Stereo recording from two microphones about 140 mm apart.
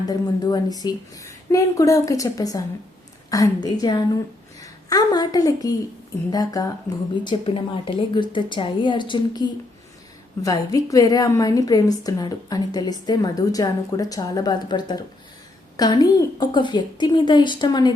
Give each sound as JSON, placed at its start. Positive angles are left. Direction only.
{"t": 0.1, "sound": "a woman's voice", "side_deg": 30}
{"t": 7.3, "sound": "a woman's voice", "side_deg": 40}